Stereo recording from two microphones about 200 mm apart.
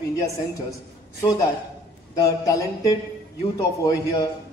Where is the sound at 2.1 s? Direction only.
15° left (ahead or behind).